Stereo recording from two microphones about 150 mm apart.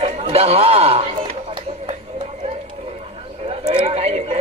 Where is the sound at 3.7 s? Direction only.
40° right (ahead or behind).